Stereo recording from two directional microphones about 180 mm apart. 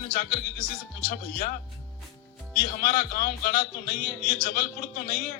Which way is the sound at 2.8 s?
50° left (ahead or behind).